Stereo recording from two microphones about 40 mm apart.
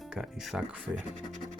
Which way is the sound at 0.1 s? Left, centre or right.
Centre.